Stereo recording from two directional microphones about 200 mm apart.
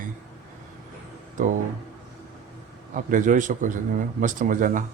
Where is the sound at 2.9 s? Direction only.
40° right (ahead or behind).